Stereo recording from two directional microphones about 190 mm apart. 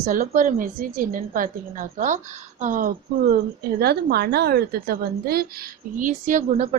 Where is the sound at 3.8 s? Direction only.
55° right (ahead or behind).